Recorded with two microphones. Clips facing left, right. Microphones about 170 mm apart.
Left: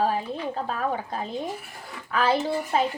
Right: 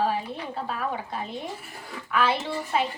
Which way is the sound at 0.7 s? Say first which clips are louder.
Left 2 dB; 40° left (ahead or behind).